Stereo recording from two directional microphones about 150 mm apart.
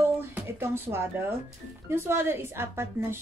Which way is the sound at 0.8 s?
15° right (ahead or behind).